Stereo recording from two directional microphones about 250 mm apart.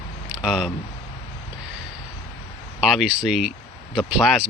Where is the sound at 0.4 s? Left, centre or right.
Centre.